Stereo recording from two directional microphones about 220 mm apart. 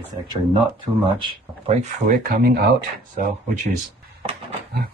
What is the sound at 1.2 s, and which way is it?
Speech, 25° right (ahead or behind).